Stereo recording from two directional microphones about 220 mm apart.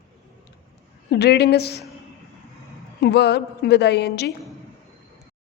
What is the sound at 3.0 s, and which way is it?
A woman's voice, 50° left (ahead or behind).